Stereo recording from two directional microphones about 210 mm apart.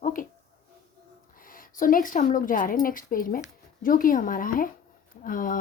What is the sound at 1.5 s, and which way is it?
Speech, 40° left (ahead or behind).